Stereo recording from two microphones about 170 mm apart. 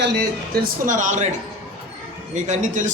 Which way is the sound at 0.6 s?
50° right (ahead or behind).